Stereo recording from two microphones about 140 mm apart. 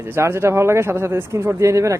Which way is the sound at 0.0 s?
15° right (ahead or behind).